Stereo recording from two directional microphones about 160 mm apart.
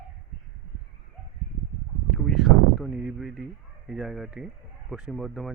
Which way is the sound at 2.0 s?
5° right (ahead or behind).